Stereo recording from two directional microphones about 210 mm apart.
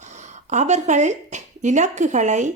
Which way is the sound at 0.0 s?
35° right (ahead or behind).